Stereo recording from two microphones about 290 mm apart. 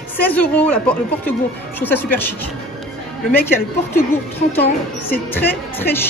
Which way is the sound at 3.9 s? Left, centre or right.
Centre.